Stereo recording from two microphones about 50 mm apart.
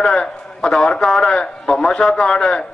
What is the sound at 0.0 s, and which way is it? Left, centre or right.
A man's voice, centre.